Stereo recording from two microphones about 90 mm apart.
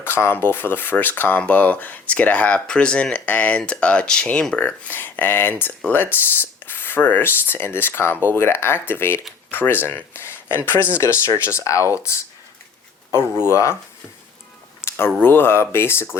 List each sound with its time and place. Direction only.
0.0 s speech: 25° left (ahead or behind)
13.1 s speech: 30° left (ahead or behind)
14.8 s a sound: 25° left (ahead or behind)
15.2 s speech: 25° left (ahead or behind)